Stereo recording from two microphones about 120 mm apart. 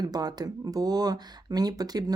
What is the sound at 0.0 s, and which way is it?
Speech, 35° right (ahead or behind).